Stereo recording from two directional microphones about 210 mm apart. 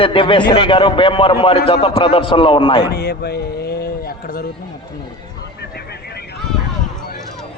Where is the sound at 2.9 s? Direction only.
50° left (ahead or behind).